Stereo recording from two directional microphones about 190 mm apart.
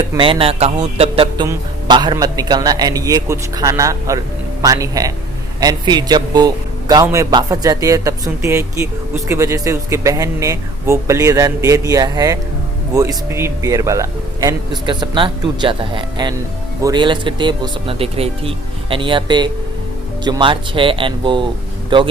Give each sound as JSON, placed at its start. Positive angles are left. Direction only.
{"t": 0.2, "sound": "speech", "side_deg": -30}